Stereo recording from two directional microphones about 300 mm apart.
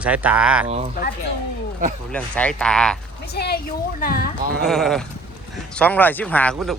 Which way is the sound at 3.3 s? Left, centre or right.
Left.